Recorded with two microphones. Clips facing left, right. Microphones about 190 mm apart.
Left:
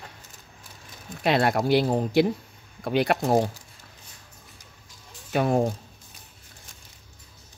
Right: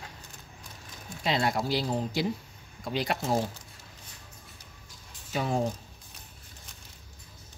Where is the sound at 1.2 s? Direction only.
60° left (ahead or behind).